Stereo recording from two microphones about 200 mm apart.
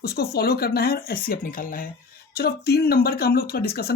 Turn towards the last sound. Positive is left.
turn(degrees=50)  # may be behind; listen again after turning